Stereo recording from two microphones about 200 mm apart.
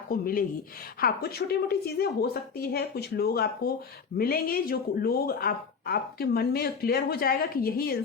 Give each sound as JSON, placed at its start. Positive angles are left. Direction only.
{"t": 0.1, "sound": "speech", "side_deg": 45}